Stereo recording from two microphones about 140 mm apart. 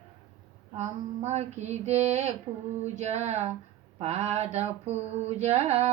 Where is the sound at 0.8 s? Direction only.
50° right (ahead or behind).